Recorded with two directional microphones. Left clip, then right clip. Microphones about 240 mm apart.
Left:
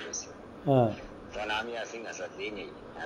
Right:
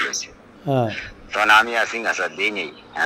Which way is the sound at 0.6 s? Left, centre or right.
Centre.